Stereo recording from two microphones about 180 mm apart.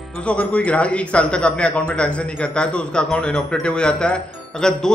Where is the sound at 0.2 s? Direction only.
5° left (ahead or behind).